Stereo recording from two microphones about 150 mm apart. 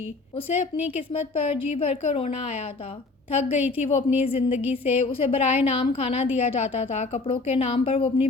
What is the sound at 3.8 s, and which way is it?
Speech, 45° left (ahead or behind).